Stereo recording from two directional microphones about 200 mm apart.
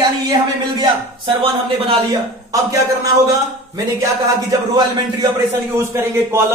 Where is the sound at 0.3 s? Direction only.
25° right (ahead or behind).